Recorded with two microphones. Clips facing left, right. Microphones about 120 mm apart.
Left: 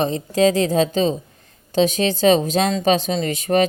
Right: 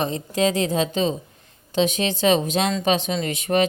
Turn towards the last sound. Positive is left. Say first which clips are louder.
# left 3 dB
turn(degrees=40)  # may be behind; listen again after turning